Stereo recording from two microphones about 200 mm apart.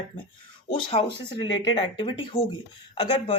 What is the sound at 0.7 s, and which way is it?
A woman's voice, 30° left (ahead or behind).